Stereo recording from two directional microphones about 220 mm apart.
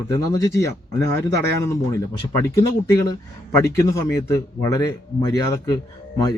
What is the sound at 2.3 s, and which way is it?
A man's voice, 15° left (ahead or behind).